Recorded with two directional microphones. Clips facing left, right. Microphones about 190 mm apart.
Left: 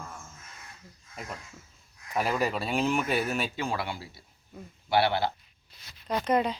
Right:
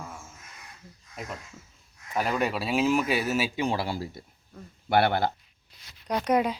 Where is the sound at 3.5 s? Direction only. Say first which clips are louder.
Right 4 dB; 15° right (ahead or behind).